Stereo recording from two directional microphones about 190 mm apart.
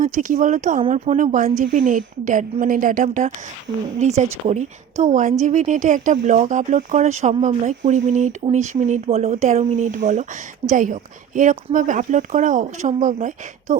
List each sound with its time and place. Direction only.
0.0 s a woman's voice: 45° right (ahead or behind)